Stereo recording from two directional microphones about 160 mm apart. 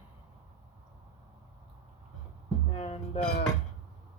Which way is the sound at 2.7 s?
40° left (ahead or behind).